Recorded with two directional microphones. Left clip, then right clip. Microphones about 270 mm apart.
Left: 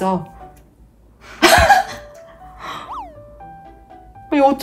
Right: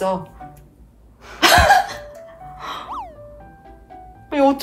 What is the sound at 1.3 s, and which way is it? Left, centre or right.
Cough, centre.